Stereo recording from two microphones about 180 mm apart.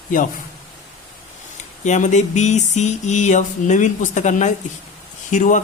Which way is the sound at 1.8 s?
40° left (ahead or behind).